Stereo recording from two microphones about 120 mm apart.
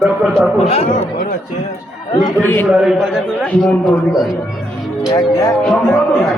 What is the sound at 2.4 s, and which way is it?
Speech, 15° left (ahead or behind).